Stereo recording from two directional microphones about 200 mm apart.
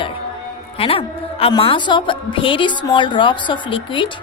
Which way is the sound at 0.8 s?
30° left (ahead or behind).